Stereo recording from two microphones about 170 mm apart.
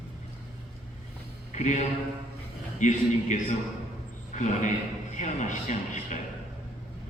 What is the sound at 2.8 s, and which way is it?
A man's voice, 45° left (ahead or behind).